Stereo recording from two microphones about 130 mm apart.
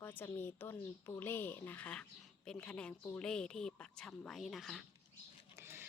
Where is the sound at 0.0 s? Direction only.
15° left (ahead or behind).